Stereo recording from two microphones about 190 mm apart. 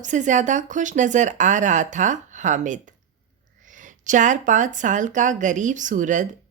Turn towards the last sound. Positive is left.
turn(degrees=-40)  # may be behind; listen again after turning